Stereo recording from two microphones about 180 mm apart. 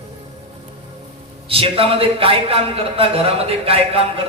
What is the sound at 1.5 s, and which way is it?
A man's voice, 30° right (ahead or behind).